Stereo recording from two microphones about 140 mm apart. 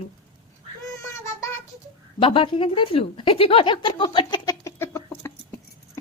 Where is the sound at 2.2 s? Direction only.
35° left (ahead or behind); by 5.3 s 20° left (ahead or behind).